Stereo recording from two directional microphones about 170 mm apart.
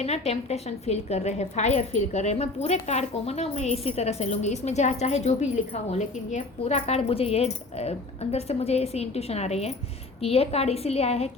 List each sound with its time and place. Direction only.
0.0 s a woman's voice: 40° left (ahead or behind)